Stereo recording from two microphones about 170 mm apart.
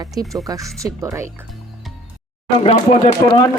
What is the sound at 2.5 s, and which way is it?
Speech, 40° left (ahead or behind).